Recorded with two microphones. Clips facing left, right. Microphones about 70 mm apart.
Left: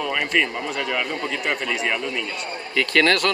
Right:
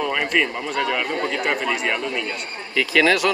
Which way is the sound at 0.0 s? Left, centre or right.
Centre.